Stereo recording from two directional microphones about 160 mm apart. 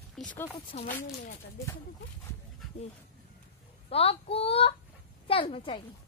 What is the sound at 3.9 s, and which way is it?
A woman's voice, 40° left (ahead or behind).